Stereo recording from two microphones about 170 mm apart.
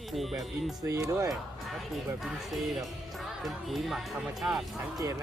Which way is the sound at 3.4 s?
Centre (ahead or behind).